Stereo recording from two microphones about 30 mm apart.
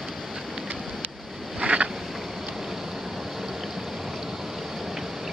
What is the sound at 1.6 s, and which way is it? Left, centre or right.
Vehicle, right.